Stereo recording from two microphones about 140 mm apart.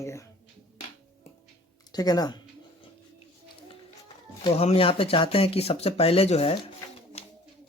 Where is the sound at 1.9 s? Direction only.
30° left (ahead or behind).